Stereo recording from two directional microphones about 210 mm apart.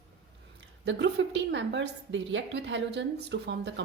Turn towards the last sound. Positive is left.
turn(degrees=-55)  # may be behind; listen again after turning